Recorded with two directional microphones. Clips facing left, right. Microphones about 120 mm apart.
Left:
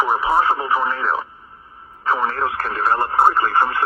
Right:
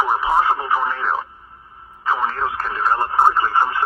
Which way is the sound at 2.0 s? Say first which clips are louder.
Left 1 dB; 50° left (ahead or behind).